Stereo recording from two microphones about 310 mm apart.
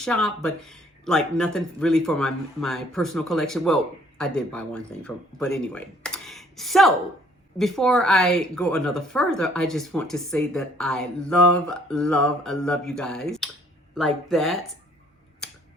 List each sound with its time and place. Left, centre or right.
0.0 s speech: centre